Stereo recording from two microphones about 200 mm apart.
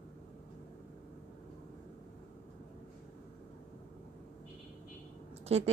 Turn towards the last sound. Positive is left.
turn(degrees=-30)  # may be behind; listen again after turning